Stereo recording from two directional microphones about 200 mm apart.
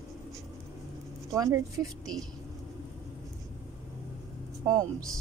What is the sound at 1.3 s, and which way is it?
Speech, 15° right (ahead or behind).